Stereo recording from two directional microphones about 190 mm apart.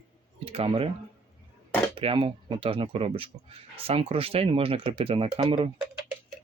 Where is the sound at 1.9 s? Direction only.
25° right (ahead or behind).